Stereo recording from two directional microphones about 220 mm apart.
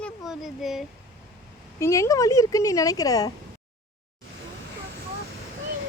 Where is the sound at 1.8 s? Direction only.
15° left (ahead or behind).